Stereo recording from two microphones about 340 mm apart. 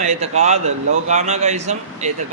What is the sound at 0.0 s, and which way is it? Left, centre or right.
Speech, centre.